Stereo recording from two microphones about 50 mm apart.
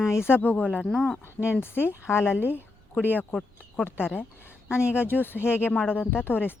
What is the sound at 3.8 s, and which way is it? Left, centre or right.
Speech, left.